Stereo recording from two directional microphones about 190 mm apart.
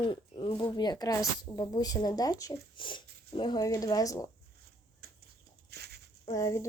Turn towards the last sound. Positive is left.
turn(degrees=15)  # may be behind; listen again after turning